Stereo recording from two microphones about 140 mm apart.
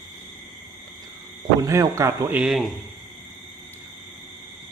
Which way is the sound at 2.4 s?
Centre (ahead or behind).